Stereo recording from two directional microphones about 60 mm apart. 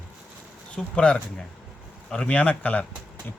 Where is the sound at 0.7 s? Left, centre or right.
Centre.